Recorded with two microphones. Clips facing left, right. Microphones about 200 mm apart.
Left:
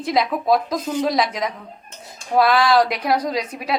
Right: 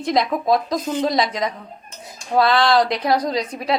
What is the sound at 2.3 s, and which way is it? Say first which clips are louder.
Stir: even; 10° left (ahead or behind).